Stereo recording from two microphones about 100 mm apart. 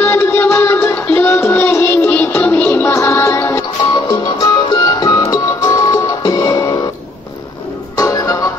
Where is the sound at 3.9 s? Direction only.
40° left (ahead or behind).